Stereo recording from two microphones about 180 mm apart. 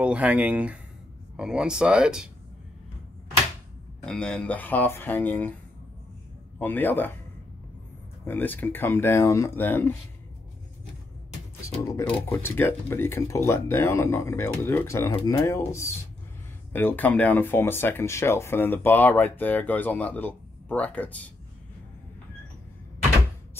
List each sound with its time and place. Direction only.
0.0 s speech: 5° right (ahead or behind)
4.0 s speech: 5° left (ahead or behind)
6.6 s speech: 10° left (ahead or behind)
8.3 s speech: 10° left (ahead or behind)
12.1 s speech: 10° left (ahead or behind)